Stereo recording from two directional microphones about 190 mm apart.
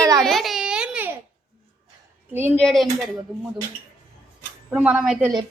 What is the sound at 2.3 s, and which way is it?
Speech, 10° right (ahead or behind).